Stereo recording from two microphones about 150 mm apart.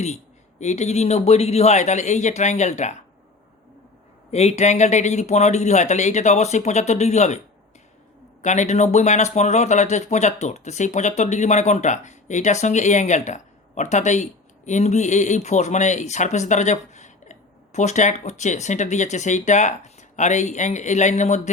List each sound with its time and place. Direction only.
0.6 s speech: 50° left (ahead or behind)
4.3 s speech: 45° left (ahead or behind)
8.4 s speech: 50° left (ahead or behind)